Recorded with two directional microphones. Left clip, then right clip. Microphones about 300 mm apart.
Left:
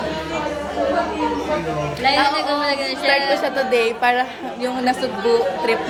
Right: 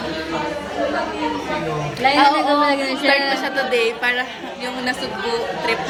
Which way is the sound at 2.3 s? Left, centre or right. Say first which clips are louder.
Right 3 dB; centre.